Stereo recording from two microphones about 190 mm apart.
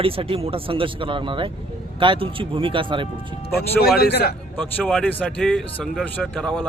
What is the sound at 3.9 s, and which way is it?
Speech, 55° left (ahead or behind).